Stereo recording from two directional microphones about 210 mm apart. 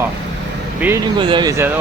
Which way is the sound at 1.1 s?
20° right (ahead or behind).